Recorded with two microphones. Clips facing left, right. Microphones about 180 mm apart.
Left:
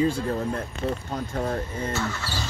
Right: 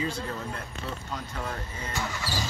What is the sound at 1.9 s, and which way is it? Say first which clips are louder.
Speech: left 4 dB; 15° right (ahead or behind).